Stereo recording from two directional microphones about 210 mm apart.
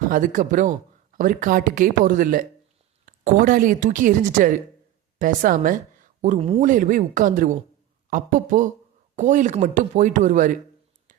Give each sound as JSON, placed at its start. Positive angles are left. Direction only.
{"t": 0.1, "sound": "a woman's voice", "side_deg": -40}